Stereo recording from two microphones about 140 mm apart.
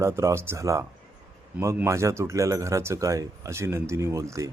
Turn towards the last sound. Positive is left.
turn(degrees=-20)  # may be behind; listen again after turning